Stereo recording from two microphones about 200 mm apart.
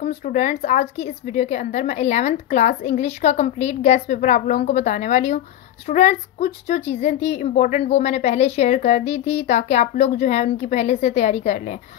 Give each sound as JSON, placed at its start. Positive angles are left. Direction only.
{"t": 0.0, "sound": "a woman's voice", "side_deg": 40}